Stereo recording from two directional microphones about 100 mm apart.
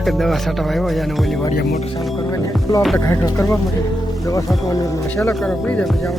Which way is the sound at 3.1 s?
30° left (ahead or behind).